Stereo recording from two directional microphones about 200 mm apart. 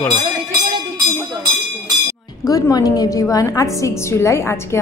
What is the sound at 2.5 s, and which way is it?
A woman's voice, 15° left (ahead or behind).